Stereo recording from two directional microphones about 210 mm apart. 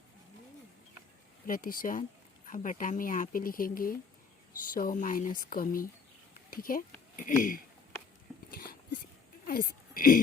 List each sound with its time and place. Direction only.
1.5 s speech: 40° left (ahead or behind)
8.4 s a sound: 45° left (ahead or behind)
9.5 s speech: 45° left (ahead or behind)